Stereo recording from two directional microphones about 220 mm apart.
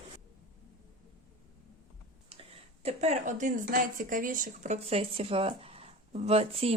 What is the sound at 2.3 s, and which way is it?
A woman's voice, 25° right (ahead or behind).